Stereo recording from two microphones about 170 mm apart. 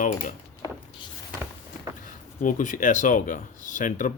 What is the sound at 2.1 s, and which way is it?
Speech, 50° left (ahead or behind).